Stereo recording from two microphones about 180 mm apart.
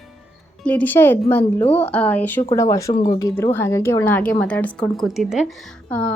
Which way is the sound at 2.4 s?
20° left (ahead or behind).